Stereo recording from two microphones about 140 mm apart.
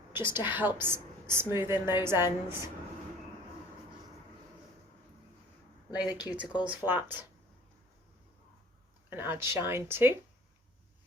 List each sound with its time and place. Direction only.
0.3 s a woman's voice: 15° right (ahead or behind)
6.0 s a woman's voice: 10° right (ahead or behind)
9.0 s a woman's voice: 15° right (ahead or behind)